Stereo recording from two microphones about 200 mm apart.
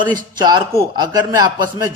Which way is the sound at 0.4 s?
20° right (ahead or behind).